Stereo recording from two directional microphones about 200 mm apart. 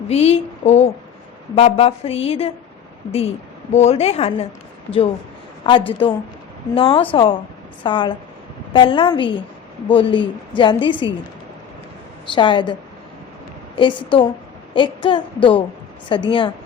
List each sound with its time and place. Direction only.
0.1 s a woman's voice: 30° left (ahead or behind)
5.7 s a woman's voice: 25° left (ahead or behind)
12.3 s a woman's voice: 25° left (ahead or behind)
13.7 s a woman's voice: 25° left (ahead or behind)